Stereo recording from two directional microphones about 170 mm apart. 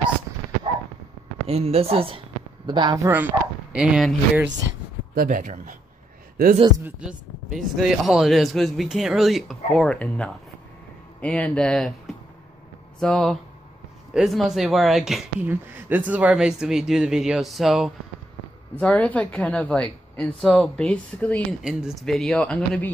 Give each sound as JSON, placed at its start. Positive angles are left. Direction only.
{"t": 1.5, "sound": "speech", "side_deg": -35}
{"t": 3.1, "sound": "speech", "side_deg": -10}
{"t": 5.1, "sound": "speech", "side_deg": -55}
{"t": 6.8, "sound": "a woman's voice", "side_deg": -5}